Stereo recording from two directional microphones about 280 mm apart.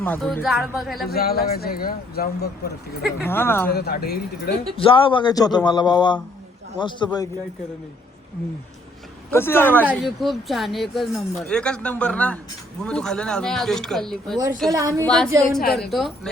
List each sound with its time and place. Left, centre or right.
0.0 s speech: centre
1.1 s speech: left
3.2 s speech: centre
3.7 s speech: left
4.8 s speech: centre
9.3 s speech: centre
14.7 s a woman's voice: centre
15.0 s speech: centre
15.3 s a woman's voice: centre
15.6 s speech: left
15.9 s speech: centre